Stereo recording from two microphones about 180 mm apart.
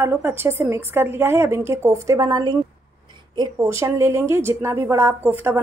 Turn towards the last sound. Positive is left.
turn(degrees=-10)  # may be behind; listen again after turning